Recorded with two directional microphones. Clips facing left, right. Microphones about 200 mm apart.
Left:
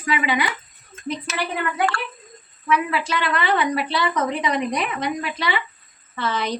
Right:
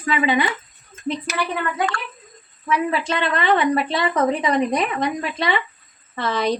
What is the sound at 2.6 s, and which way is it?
A woman's voice, 35° right (ahead or behind).